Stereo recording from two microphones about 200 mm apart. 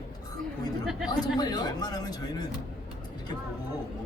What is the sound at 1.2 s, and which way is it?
Speech, 20° left (ahead or behind).